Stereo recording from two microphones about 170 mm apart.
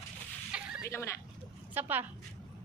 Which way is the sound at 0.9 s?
15° left (ahead or behind).